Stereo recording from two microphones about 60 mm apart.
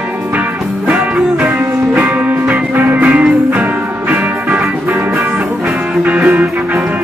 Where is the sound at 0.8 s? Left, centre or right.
Right.